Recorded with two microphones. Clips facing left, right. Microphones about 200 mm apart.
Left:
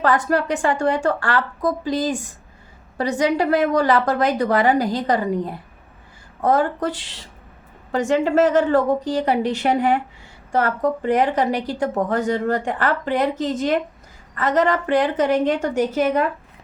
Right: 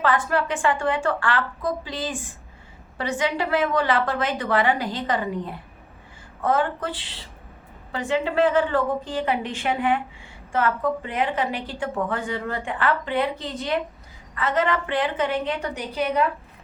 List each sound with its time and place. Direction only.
0.0 s a woman's voice: 40° left (ahead or behind)